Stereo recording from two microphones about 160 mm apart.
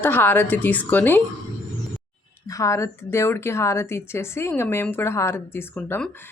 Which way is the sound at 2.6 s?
20° left (ahead or behind).